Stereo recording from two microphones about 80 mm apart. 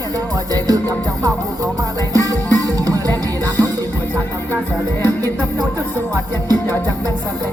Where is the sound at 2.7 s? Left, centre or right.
Right.